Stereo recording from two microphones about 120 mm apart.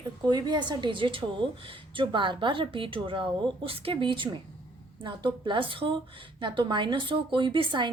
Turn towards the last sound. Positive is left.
turn(degrees=-40)  # may be behind; listen again after turning